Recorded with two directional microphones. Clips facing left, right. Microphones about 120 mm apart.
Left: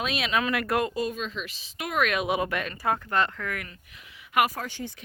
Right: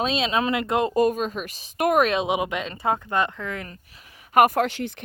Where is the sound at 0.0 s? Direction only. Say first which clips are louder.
Right 4 dB; 30° right (ahead or behind).